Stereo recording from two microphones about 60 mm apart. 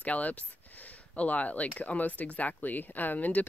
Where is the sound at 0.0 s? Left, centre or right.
Left.